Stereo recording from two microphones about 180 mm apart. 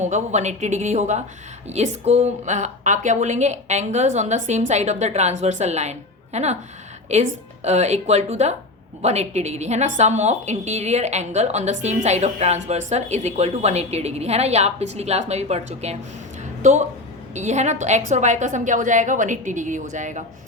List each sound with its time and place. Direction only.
0.0 s a woman's voice: 40° right (ahead or behind)